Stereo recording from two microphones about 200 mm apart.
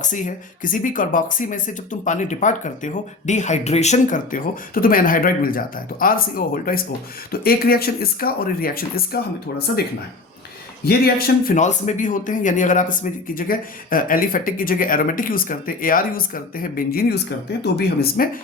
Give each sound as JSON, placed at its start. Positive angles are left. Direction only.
{"t": 0.0, "sound": "speech", "side_deg": 40}
{"t": 10.8, "sound": "speech", "side_deg": 50}